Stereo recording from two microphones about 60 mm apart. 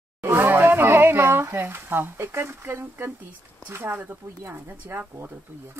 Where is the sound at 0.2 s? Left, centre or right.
Right.